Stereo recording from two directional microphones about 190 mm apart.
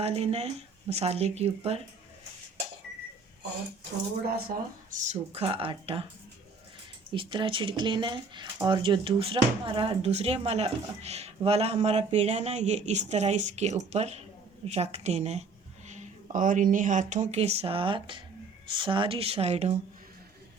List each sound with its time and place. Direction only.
0.0 s speech: 30° right (ahead or behind)
4.9 s speech: 35° right (ahead or behind)
7.1 s speech: 25° right (ahead or behind)